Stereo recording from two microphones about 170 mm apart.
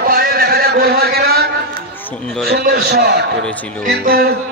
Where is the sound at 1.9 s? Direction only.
10° left (ahead or behind).